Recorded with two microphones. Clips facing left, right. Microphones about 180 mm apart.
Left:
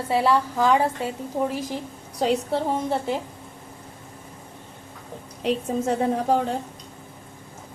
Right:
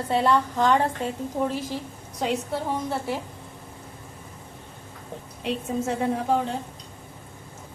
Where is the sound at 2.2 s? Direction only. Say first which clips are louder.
Left 4 dB; 30° left (ahead or behind).